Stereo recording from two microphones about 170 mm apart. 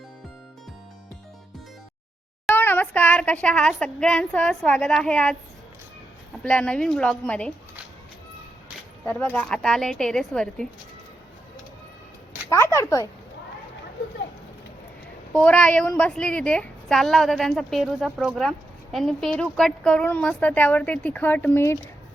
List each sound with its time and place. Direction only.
2.5 s speech: 10° left (ahead or behind)
6.4 s a woman's voice: 5° left (ahead or behind)
9.0 s a woman's voice: 10° left (ahead or behind)
12.5 s a woman's voice: 15° left (ahead or behind)
15.3 s a woman's voice: 5° left (ahead or behind)